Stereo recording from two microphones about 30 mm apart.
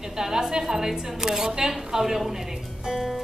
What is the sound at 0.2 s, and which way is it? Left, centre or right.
A woman's voice, right.